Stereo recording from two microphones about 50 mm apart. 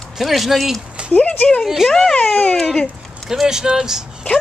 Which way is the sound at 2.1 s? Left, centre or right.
Left.